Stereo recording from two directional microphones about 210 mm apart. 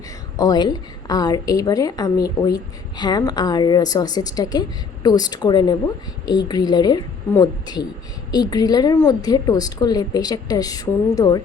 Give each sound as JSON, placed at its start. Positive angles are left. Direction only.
{"t": 0.3, "sound": "a woman's voice", "side_deg": 20}